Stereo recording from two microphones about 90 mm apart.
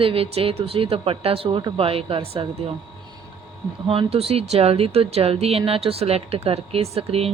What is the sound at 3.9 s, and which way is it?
Speech, 90° right.